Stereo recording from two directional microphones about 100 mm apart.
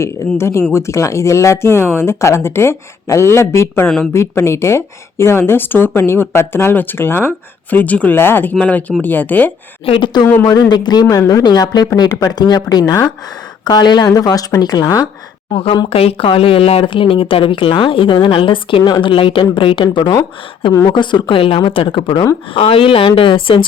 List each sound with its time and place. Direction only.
0.0 s a woman's voice: 25° left (ahead or behind)
3.8 s speech: 5° left (ahead or behind)
4.1 s a woman's voice: 25° left (ahead or behind)
9.8 s speech: 65° left (ahead or behind)
10.4 s speech: 40° left (ahead or behind)
15.9 s speech: 75° left (ahead or behind); by 22.3 s 50° left (ahead or behind)
22.5 s speech: 65° left (ahead or behind)